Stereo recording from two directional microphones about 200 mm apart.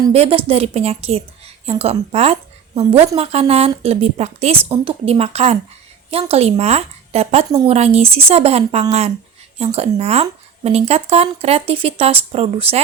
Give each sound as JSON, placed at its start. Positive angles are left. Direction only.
{"t": 0.1, "sound": "a woman's voice", "side_deg": -30}